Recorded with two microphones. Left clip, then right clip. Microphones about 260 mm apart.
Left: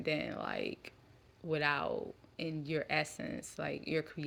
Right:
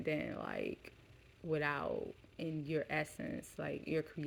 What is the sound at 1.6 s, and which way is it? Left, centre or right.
Speech, left.